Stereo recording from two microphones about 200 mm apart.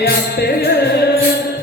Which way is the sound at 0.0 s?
55° left (ahead or behind).